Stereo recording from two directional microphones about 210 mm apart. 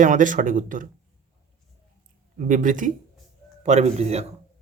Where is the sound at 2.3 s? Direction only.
40° right (ahead or behind).